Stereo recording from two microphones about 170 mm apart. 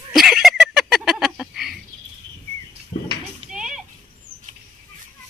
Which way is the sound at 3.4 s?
5° right (ahead or behind).